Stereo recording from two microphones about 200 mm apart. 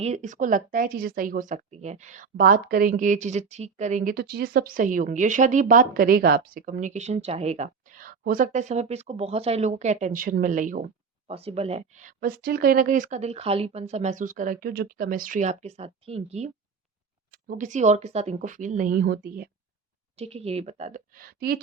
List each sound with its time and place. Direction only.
0.0 s speech: 35° right (ahead or behind)
17.3 s speech: 45° right (ahead or behind)
20.1 s speech: 30° right (ahead or behind); by 21.6 s 50° right (ahead or behind)